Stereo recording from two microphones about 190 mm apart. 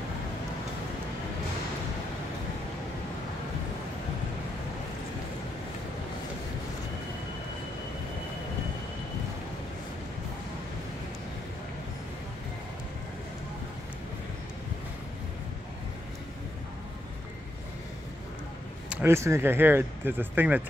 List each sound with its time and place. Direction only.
18.9 s speech: 10° right (ahead or behind)